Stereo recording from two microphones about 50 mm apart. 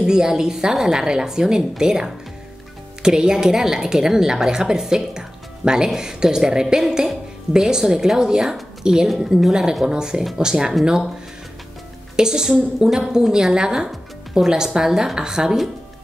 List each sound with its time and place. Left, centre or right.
0.0 s a woman's voice: centre
12.2 s a woman's voice: centre